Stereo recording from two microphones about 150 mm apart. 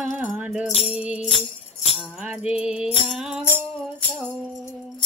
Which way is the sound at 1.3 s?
40° left (ahead or behind).